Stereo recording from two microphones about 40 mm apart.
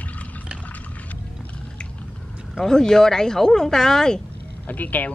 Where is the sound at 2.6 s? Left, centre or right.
Centre.